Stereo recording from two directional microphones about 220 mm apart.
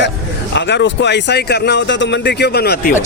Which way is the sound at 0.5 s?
50° left (ahead or behind).